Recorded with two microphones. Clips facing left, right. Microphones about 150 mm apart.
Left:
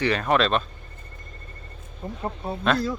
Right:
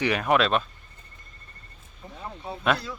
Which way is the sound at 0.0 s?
10° right (ahead or behind).